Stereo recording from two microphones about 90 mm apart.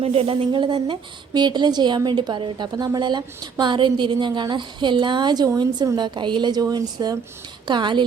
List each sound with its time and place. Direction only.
0.0 s a woman's voice: 90° right; by 7.2 s 45° right (ahead or behind)
7.7 s a woman's voice: 60° right (ahead or behind)